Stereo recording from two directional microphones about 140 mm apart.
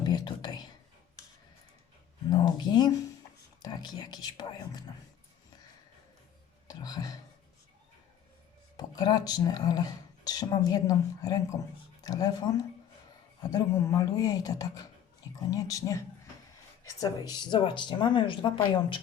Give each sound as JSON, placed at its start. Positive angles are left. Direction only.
{"t": 0.0, "sound": "whispering", "side_deg": 30}
{"t": 2.3, "sound": "speech", "side_deg": 30}
{"t": 6.7, "sound": "speech", "side_deg": 25}
{"t": 8.7, "sound": "speech", "side_deg": 30}